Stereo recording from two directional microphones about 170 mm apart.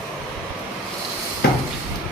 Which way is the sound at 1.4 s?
75° left (ahead or behind).